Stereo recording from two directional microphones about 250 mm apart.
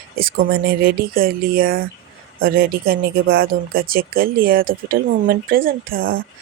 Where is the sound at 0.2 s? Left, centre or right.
Right.